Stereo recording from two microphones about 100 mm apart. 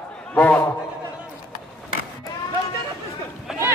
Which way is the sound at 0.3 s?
15° left (ahead or behind).